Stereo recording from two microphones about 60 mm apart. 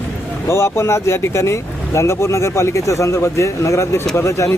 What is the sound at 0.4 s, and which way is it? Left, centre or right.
Speech, left.